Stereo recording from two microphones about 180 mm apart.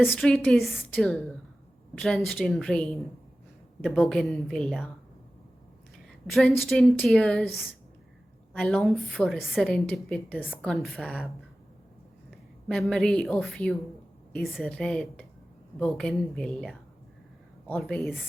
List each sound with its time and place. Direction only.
0.0 s a woman's voice: 5° left (ahead or behind)
6.2 s a woman's voice: centre (ahead or behind)
12.6 s a woman's voice: 5° left (ahead or behind)
17.7 s a woman's voice: centre (ahead or behind)